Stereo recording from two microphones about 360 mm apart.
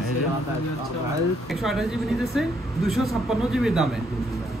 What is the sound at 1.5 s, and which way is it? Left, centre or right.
Speech, centre.